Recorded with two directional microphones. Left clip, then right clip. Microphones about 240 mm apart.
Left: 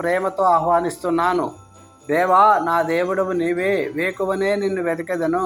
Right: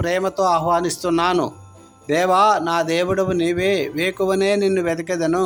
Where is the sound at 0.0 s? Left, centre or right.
Right.